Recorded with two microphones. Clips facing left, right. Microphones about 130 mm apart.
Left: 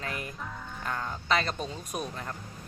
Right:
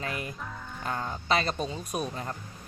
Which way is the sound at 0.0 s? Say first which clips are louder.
Right 2 dB; 15° right (ahead or behind).